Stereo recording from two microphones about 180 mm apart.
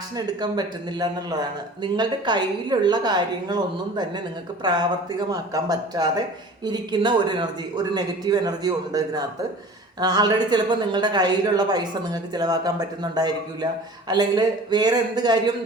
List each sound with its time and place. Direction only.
0.3 s a man's voice: 20° right (ahead or behind)